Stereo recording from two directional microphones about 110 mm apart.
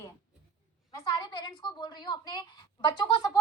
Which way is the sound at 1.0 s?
35° left (ahead or behind).